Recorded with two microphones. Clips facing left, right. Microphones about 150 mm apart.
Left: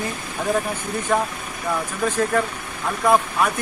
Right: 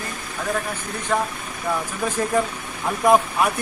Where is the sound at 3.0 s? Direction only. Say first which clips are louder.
Right 1 dB; 15° right (ahead or behind).